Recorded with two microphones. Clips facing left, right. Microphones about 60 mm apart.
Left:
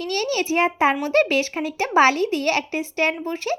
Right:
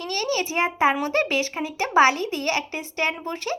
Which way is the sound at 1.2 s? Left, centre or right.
Left.